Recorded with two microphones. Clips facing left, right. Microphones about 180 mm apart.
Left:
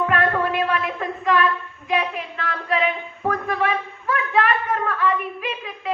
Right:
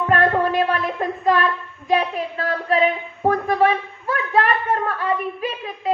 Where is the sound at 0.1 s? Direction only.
35° right (ahead or behind).